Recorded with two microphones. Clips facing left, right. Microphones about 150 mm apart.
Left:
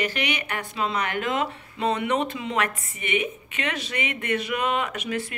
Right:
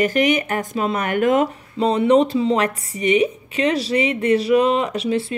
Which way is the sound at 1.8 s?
30° right (ahead or behind).